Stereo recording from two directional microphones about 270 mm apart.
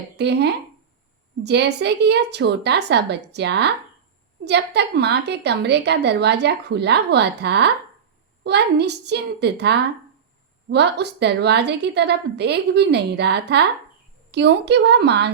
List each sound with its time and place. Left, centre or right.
0.2 s a woman's voice: right